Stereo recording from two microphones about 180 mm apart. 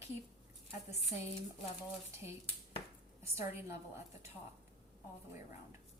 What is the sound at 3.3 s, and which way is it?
Speech, 15° right (ahead or behind).